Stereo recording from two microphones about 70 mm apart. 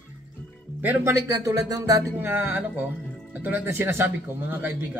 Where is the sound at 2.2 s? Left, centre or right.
Right.